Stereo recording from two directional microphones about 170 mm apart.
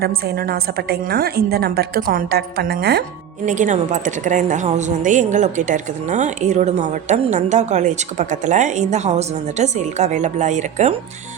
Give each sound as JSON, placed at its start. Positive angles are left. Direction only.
{"t": 0.0, "sound": "a woman's voice", "side_deg": -65}
{"t": 3.4, "sound": "a woman's voice", "side_deg": -45}